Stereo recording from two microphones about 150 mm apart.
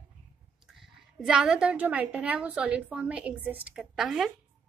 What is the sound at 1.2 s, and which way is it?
A woman's voice, 5° right (ahead or behind).